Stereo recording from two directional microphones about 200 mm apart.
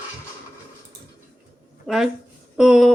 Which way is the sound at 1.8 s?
Centre (ahead or behind).